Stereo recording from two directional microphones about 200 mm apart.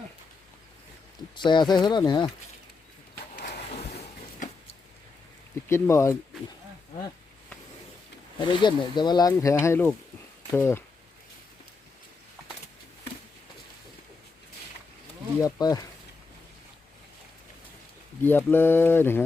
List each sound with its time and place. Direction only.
1.4 s speech: 20° left (ahead or behind)
5.6 s speech: 15° left (ahead or behind)
8.4 s speech: 25° left (ahead or behind)
15.4 s speech: 20° left (ahead or behind)
18.2 s speech: 10° left (ahead or behind)